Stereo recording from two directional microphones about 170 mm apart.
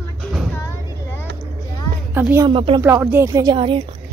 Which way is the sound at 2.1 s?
15° right (ahead or behind).